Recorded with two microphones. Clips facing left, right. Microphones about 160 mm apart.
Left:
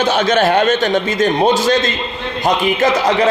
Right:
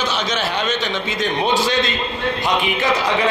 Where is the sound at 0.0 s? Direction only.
55° left (ahead or behind).